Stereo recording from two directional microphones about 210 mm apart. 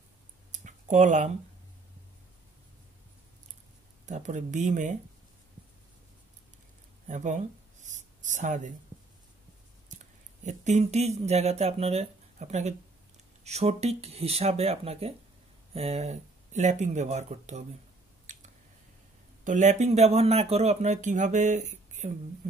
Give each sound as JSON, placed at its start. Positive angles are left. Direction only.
{"t": 0.5, "sound": "a sound", "side_deg": -35}
{"t": 4.0, "sound": "speech", "side_deg": -35}
{"t": 7.1, "sound": "a sound", "side_deg": -35}
{"t": 10.4, "sound": "speech", "side_deg": -35}
{"t": 18.2, "sound": "squish", "side_deg": -35}
{"t": 19.4, "sound": "speech", "side_deg": -35}